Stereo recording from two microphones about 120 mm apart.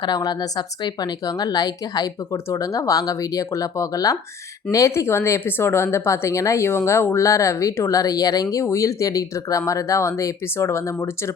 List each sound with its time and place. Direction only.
0.0 s speech: 35° left (ahead or behind)